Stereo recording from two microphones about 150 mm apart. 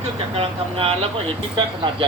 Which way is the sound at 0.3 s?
40° right (ahead or behind).